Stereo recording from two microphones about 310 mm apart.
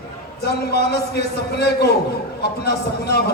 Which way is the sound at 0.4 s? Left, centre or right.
Left.